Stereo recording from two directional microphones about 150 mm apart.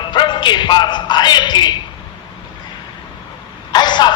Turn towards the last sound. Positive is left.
turn(degrees=30)  # may be behind; listen again after turning